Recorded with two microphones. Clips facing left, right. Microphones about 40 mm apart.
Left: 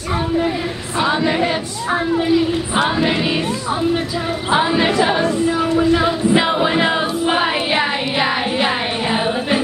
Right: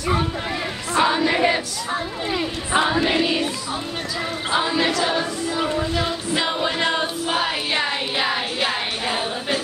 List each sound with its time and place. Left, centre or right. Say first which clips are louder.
0.9 s choir: left 1 dB; centre
2.7 s choir: right 1 dB; centre
4.5 s music: left 5 dB; left
5.8 s a sound: left 8 dB; left
7.2 s music: left 7 dB; left